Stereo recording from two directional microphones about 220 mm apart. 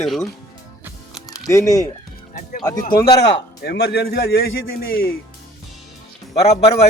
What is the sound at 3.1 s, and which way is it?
A man's voice, 50° left (ahead or behind).